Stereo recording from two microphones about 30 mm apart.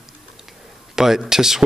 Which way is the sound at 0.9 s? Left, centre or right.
Centre.